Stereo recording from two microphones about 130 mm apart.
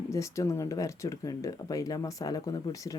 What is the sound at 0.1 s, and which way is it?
Speech, 25° left (ahead or behind).